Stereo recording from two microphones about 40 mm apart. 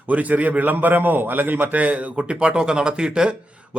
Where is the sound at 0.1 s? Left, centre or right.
Right.